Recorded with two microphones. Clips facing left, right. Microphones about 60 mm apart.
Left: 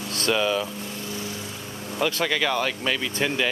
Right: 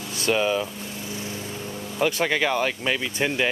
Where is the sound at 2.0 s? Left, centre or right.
Right.